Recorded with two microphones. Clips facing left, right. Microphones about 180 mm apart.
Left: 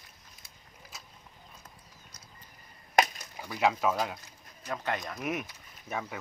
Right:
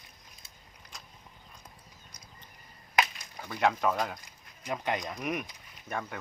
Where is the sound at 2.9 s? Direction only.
40° left (ahead or behind).